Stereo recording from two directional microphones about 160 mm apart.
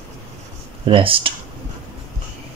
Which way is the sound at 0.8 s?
35° right (ahead or behind).